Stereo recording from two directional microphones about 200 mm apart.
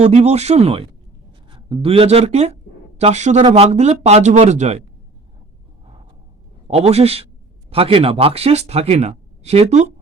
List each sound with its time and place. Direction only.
0.0 s speech: 35° right (ahead or behind)
6.7 s speech: 30° right (ahead or behind)